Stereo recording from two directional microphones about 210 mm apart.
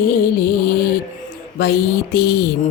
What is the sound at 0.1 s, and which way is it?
Music, 50° left (ahead or behind).